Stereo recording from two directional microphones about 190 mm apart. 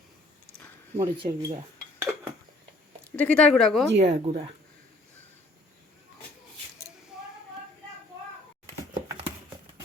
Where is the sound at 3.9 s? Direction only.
35° right (ahead or behind).